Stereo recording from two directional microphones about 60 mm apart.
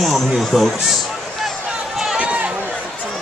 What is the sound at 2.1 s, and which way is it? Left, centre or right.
Run, centre.